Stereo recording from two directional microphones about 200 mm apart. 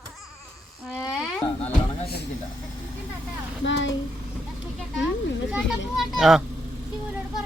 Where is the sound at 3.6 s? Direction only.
65° left (ahead or behind).